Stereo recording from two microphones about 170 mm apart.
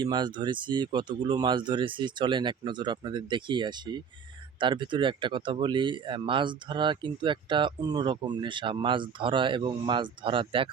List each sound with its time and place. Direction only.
0.0 s speech: 25° right (ahead or behind)